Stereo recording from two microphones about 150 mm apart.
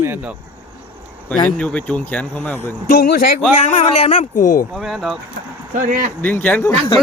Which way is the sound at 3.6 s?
45° left (ahead or behind).